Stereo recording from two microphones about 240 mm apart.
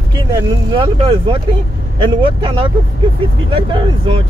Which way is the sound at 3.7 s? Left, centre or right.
Right.